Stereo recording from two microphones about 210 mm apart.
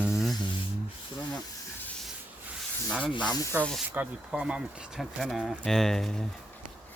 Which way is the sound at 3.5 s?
5° right (ahead or behind).